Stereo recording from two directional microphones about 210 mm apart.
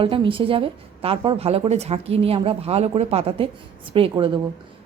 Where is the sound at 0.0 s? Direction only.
25° right (ahead or behind).